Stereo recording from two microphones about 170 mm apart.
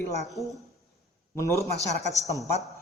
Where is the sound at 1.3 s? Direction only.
15° left (ahead or behind).